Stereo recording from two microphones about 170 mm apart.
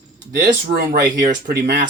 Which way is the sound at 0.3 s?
65° right (ahead or behind).